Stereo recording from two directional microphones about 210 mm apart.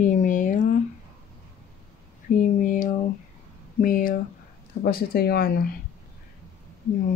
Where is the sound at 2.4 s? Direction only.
40° left (ahead or behind).